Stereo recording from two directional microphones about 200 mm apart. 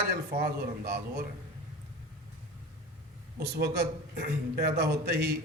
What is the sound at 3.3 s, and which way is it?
Speech, 55° right (ahead or behind).